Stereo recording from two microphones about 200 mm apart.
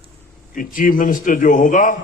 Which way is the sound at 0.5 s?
40° left (ahead or behind).